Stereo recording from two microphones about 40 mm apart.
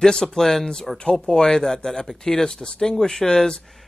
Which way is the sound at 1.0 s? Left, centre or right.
Left.